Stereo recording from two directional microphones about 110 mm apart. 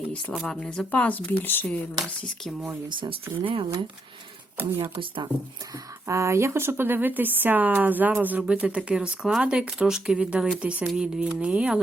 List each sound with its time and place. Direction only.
0.3 s speech: 5° left (ahead or behind)
3.3 s speech: 50° right (ahead or behind)
4.8 s speech: 50° right (ahead or behind)
5.7 s speech: 25° right (ahead or behind); by 11.8 s 10° right (ahead or behind)